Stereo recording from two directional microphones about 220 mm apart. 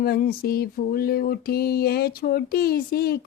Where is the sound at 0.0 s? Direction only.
45° left (ahead or behind).